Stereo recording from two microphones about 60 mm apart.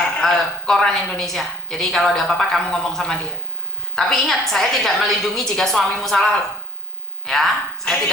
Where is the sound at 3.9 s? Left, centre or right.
Centre.